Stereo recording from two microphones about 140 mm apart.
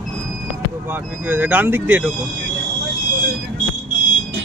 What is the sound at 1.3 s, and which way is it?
Speech, 15° right (ahead or behind).